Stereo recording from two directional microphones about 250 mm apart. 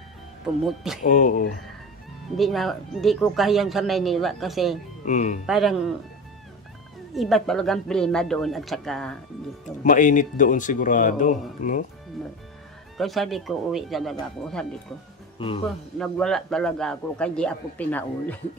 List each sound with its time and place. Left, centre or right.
1.0 s speech: left
2.3 s speech: centre
5.0 s speech: left
5.5 s speech: centre
7.2 s speech: centre
9.8 s speech: left
12.9 s speech: centre
15.3 s speech: left
16.0 s speech: centre